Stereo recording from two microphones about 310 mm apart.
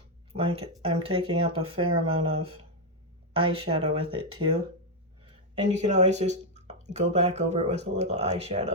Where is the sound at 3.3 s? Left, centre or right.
Centre.